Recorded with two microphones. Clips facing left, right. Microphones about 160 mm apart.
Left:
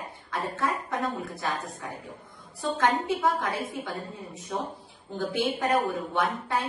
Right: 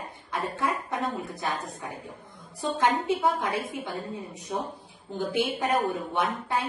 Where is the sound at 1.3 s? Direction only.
20° right (ahead or behind).